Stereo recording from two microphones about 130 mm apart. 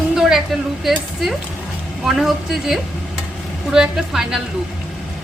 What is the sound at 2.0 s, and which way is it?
A woman's voice, centre (ahead or behind).